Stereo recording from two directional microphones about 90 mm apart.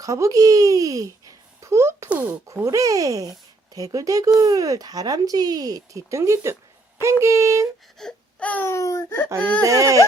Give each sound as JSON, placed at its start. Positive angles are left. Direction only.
{"t": 0.0, "sound": "speech", "side_deg": -40}
{"t": 2.0, "sound": "speech", "side_deg": -15}
{"t": 2.6, "sound": "speech", "side_deg": -40}
{"t": 7.9, "sound": "wail", "side_deg": 10}
{"t": 8.6, "sound": "speech", "side_deg": 35}
{"t": 9.0, "sound": "speech", "side_deg": 20}
{"t": 9.6, "sound": "speech", "side_deg": -40}